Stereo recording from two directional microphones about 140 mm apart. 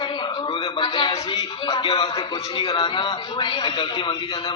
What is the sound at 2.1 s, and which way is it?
A man's voice, 25° left (ahead or behind).